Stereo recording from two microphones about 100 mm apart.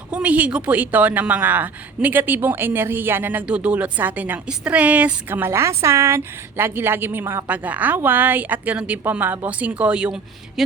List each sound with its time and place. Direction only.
0.1 s a woman's voice: 15° right (ahead or behind)